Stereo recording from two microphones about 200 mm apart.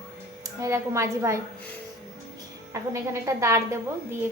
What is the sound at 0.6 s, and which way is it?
Speech, 15° right (ahead or behind).